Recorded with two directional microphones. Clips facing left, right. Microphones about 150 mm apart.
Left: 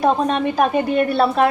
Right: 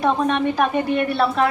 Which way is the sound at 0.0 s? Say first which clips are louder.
Left 2 dB; 35° left (ahead or behind).